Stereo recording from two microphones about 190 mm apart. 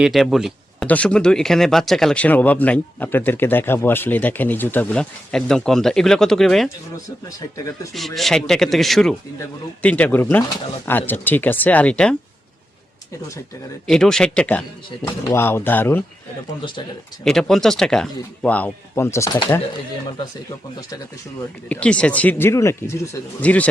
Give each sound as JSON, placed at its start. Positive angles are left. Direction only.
{"t": 0.0, "sound": "speech", "side_deg": 0}
{"t": 7.9, "sound": "speech", "side_deg": 0}
{"t": 13.8, "sound": "speech", "side_deg": 5}
{"t": 16.6, "sound": "speech", "side_deg": 25}
{"t": 17.2, "sound": "speech", "side_deg": 0}
{"t": 21.7, "sound": "speech", "side_deg": 5}